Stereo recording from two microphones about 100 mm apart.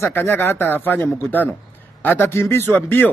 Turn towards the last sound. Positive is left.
turn(degrees=20)  # may be behind; listen again after turning